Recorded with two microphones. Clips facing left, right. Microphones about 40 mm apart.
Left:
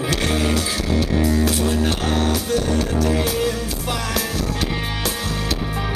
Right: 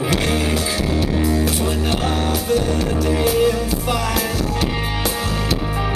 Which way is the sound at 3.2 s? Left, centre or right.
Right.